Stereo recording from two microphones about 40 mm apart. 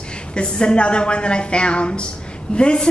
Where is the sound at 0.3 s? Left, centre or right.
Left.